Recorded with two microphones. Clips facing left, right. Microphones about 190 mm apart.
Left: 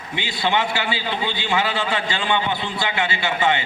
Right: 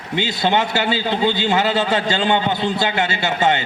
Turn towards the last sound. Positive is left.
turn(degrees=-40)  # may be behind; listen again after turning